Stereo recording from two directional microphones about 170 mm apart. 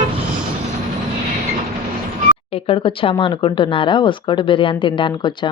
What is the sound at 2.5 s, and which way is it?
Speech, 35° left (ahead or behind).